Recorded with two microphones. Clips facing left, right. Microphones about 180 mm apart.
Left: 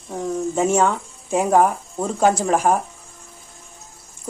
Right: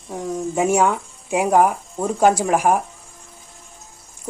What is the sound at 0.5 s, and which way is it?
Speech, 10° right (ahead or behind).